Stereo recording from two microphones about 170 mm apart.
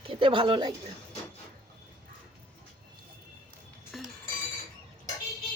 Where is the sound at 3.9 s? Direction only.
Centre (ahead or behind).